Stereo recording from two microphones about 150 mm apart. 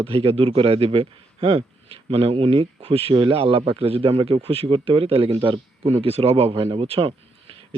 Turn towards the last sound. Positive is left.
turn(degrees=-40)  # may be behind; listen again after turning